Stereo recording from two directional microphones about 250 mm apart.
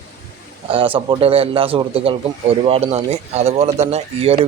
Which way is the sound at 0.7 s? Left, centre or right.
Right.